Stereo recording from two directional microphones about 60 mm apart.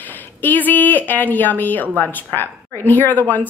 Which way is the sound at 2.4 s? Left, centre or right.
Left.